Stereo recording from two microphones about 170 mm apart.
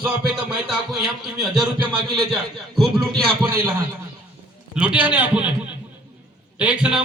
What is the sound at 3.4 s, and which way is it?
A man's voice, 15° right (ahead or behind).